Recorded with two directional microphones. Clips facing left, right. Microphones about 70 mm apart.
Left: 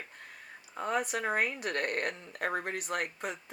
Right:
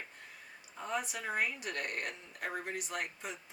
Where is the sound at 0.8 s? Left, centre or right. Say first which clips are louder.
Left 6 dB; left.